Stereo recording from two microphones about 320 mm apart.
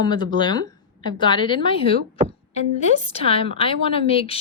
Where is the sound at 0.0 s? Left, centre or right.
Centre.